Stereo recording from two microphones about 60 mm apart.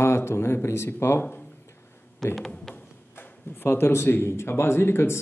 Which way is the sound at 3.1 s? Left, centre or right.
Left.